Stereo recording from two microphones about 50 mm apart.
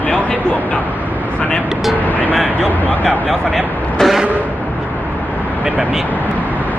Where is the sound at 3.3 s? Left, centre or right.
Centre.